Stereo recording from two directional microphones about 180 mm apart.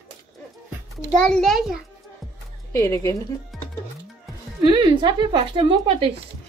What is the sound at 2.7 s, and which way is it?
Speech, 15° left (ahead or behind).